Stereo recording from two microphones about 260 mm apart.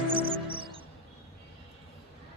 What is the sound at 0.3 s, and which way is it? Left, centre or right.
Music, centre.